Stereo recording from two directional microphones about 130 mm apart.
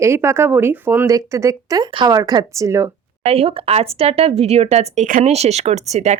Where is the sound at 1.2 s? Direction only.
25° right (ahead or behind).